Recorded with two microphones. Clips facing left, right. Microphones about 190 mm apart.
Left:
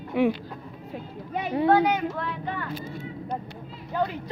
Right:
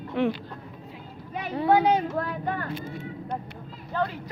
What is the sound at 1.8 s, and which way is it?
Speech, 30° right (ahead or behind).